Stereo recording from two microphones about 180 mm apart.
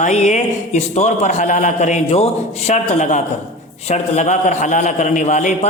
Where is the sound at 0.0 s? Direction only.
40° left (ahead or behind).